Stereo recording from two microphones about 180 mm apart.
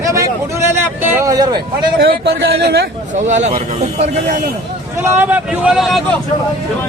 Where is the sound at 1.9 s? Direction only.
65° right (ahead or behind).